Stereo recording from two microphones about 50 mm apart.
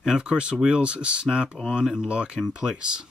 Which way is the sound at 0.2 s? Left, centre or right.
Right.